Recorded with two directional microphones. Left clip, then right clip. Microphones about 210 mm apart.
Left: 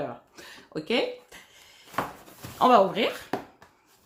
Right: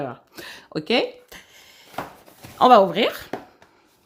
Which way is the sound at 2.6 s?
40° right (ahead or behind).